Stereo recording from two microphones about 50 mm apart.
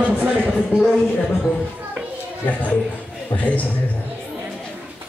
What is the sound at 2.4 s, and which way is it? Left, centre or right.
A man's voice, left.